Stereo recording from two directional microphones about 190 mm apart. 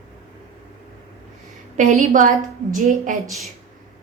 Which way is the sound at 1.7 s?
35° right (ahead or behind).